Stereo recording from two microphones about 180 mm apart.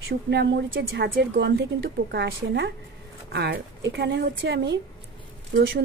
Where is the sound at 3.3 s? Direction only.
65° right (ahead or behind).